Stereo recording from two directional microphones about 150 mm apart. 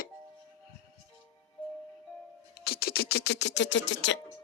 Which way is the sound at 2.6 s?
90° left.